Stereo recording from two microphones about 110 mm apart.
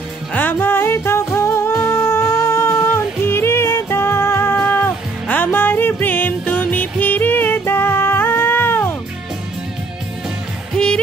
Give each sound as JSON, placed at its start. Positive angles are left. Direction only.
{"t": 0.3, "sound": "music", "side_deg": 15}